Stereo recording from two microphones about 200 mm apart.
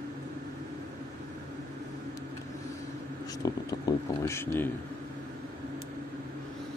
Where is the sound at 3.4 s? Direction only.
20° left (ahead or behind).